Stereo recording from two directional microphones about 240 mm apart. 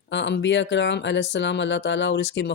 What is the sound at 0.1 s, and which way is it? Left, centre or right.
Speech, left.